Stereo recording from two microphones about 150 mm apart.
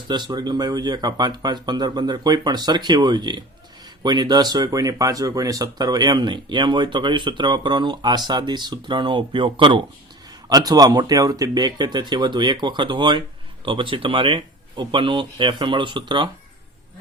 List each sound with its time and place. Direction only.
0.1 s speech: 30° right (ahead or behind)